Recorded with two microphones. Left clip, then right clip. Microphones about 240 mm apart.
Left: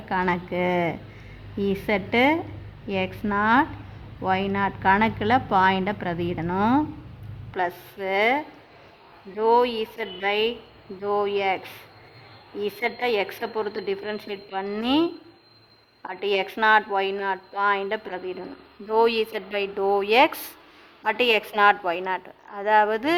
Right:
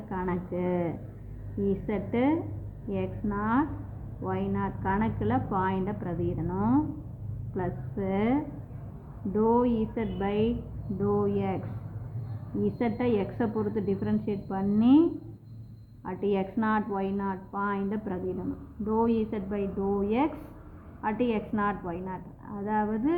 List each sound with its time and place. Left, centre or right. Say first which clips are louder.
0.1 s a woman's voice: left 9 dB; left
9.4 s a woman's voice: left 6 dB; left
12.6 s a woman's voice: left 4 dB; left
16.2 s a woman's voice: left 8 dB; left